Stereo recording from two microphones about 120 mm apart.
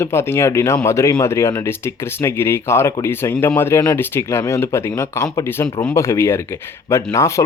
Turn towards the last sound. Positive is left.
turn(degrees=25)  # may be behind; listen again after turning